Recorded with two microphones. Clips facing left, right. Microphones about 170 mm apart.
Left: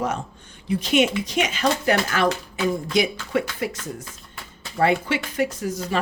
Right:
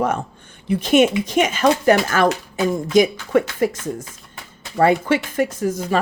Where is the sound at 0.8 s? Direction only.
50° right (ahead or behind).